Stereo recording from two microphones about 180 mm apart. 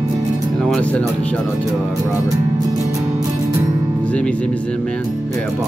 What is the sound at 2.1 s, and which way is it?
Music, 20° right (ahead or behind).